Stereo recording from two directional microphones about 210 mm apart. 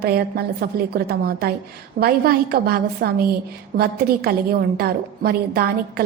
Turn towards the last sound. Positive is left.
turn(degrees=-45)  # may be behind; listen again after turning